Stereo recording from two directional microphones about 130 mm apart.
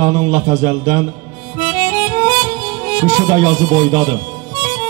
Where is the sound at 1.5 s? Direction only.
20° right (ahead or behind).